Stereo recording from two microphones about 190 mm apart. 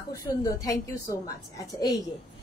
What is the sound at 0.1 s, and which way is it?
Speech, 15° left (ahead or behind).